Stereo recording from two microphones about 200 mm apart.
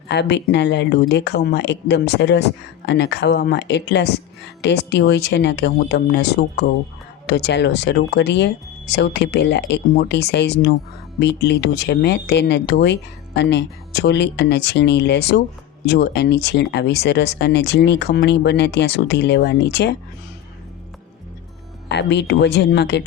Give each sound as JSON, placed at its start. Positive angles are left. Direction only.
{"t": 0.1, "sound": "speech", "side_deg": 60}
{"t": 21.8, "sound": "speech", "side_deg": 60}